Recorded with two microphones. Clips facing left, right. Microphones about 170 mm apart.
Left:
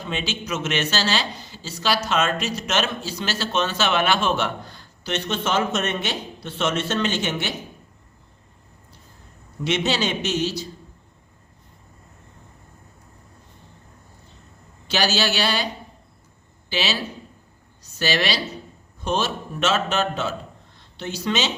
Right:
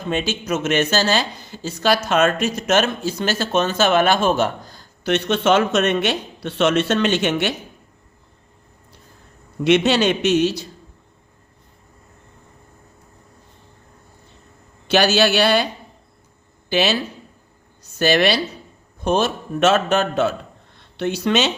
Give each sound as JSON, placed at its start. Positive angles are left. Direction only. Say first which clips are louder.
{"t": 0.1, "sound": "speech", "louder": "right 6 dB", "side_deg": -45}
{"t": 5.0, "sound": "a man's voice", "louder": "right 8 dB", "side_deg": -60}
{"t": 9.6, "sound": "a man's voice", "louder": "right 7 dB", "side_deg": -60}
{"t": 14.8, "sound": "a man's voice", "louder": "right 7 dB", "side_deg": -55}
{"t": 16.6, "sound": "speech", "louder": "right 7 dB", "side_deg": -55}
{"t": 18.0, "sound": "a man's voice", "louder": "right 7 dB", "side_deg": -55}